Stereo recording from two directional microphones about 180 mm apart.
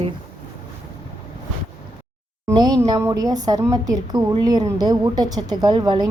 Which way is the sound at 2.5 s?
20° right (ahead or behind).